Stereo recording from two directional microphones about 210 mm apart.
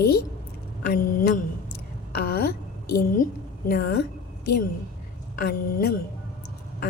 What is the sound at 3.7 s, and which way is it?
Speech, 45° left (ahead or behind).